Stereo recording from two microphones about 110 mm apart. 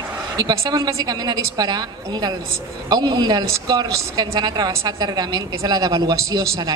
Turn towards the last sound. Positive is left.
turn(degrees=-35)  # may be behind; listen again after turning